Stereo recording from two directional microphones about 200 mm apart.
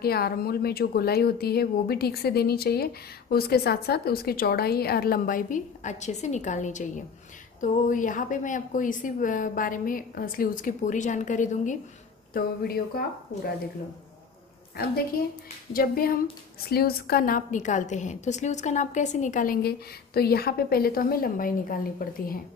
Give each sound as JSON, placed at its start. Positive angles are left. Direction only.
{"t": 0.0, "sound": "a woman's voice", "side_deg": 50}
{"t": 12.4, "sound": "speech", "side_deg": 50}
{"t": 14.8, "sound": "a woman's voice", "side_deg": 50}